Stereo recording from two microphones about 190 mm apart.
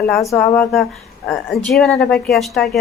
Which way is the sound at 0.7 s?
Centre (ahead or behind).